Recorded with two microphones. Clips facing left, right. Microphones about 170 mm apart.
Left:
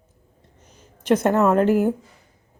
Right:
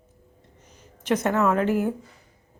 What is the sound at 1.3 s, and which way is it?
Speech, 40° left (ahead or behind).